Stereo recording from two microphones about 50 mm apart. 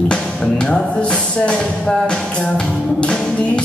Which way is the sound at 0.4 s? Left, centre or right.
Left.